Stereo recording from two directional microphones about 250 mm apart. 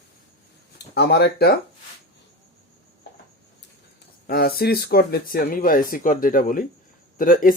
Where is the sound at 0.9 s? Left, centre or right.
Left.